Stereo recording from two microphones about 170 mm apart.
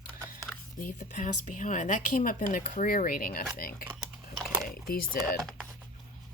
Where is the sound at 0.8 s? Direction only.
50° left (ahead or behind).